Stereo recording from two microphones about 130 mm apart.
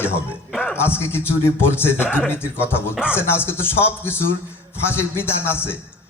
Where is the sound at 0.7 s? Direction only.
20° left (ahead or behind).